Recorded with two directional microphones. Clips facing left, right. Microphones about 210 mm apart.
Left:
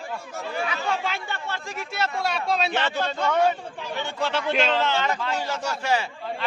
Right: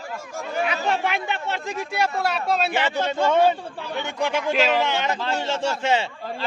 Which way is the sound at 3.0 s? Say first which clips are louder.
Right 4 dB; 25° right (ahead or behind).